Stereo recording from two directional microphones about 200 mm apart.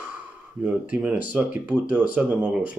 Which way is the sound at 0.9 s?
5° right (ahead or behind).